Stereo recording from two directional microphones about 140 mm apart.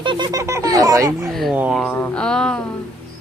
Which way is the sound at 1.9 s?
10° left (ahead or behind).